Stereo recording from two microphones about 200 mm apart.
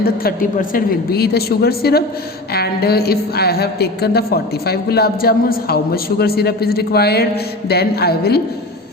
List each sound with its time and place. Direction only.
0.0 s a woman's voice: 50° left (ahead or behind)